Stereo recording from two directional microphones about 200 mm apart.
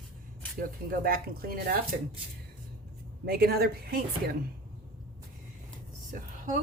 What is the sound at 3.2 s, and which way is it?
Speech, 50° right (ahead or behind).